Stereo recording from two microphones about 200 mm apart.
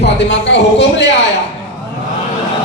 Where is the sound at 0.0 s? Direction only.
60° left (ahead or behind).